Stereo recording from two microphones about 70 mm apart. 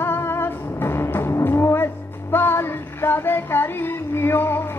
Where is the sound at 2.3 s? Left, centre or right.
Left.